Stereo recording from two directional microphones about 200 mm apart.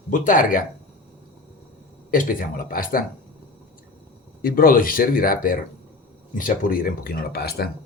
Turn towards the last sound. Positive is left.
turn(degrees=50)  # may be behind; listen again after turning